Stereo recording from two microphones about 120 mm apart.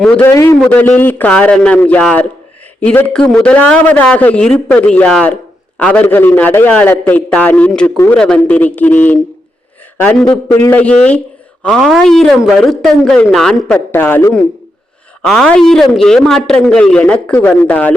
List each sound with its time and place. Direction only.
0.2 s a man's voice: 20° left (ahead or behind)
7.9 s a man's voice: 20° left (ahead or behind)
13.9 s a man's voice: 15° left (ahead or behind)
15.2 s a man's voice: 5° left (ahead or behind)